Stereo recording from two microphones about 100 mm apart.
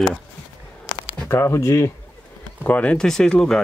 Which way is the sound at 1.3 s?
30° left (ahead or behind).